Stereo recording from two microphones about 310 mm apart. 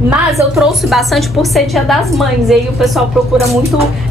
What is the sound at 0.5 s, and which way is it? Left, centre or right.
A woman's voice, centre.